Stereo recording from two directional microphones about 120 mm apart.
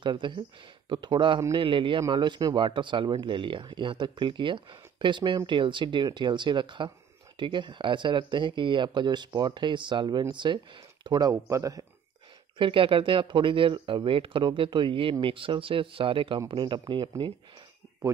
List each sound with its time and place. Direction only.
0.0 s speech: 40° right (ahead or behind)
12.5 s speech: 45° right (ahead or behind)